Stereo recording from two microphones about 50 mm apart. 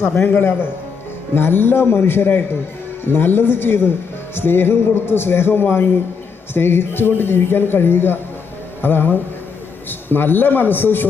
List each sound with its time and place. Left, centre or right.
0.2 s a man's voice: left